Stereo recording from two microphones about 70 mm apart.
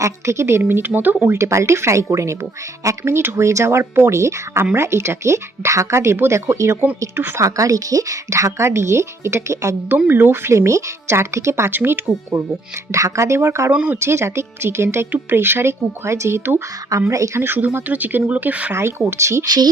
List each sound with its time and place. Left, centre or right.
0.0 s speech: right
1.3 s speech: right
7.3 s a woman's voice: right
10.1 s speech: right
10.5 s speech: right
12.9 s a woman's voice: right
13.7 s speech: centre
14.0 s a woman's voice: right
17.4 s speech: right
18.7 s speech: right